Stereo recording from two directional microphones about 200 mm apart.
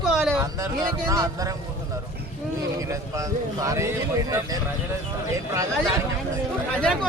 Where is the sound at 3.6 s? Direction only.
15° right (ahead or behind).